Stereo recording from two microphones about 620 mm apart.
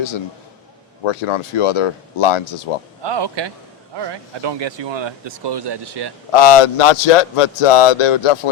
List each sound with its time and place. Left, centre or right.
1.0 s speech: left
3.0 s speech: right
6.3 s speech: left